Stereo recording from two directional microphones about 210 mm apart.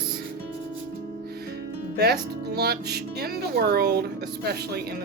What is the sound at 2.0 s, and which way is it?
Speech, 50° right (ahead or behind).